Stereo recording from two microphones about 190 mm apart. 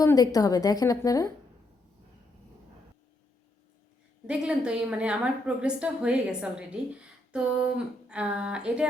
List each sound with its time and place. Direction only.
0.0 s a woman's voice: 20° left (ahead or behind)
4.3 s a woman's voice: 5° right (ahead or behind)